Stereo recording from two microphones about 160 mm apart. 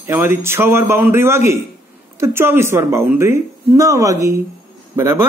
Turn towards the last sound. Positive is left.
turn(degrees=-15)  # may be behind; listen again after turning